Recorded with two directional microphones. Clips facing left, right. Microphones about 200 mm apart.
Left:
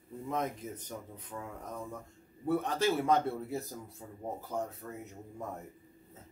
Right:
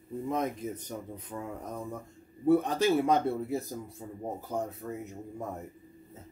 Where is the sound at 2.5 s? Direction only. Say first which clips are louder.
Right 6 dB; 15° right (ahead or behind).